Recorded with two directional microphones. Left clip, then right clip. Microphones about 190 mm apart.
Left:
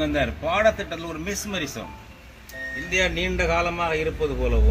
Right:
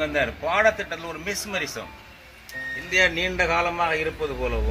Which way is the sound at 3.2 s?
5° left (ahead or behind).